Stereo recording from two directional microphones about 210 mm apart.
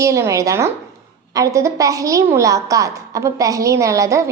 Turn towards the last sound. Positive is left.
turn(degrees=-15)  # may be behind; listen again after turning